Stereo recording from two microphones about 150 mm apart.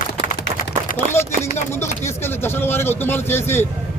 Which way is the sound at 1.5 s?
15° left (ahead or behind).